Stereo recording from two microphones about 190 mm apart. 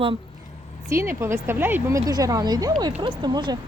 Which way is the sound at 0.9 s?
15° right (ahead or behind).